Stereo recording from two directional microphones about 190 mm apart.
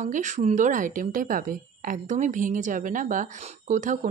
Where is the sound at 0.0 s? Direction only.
40° right (ahead or behind).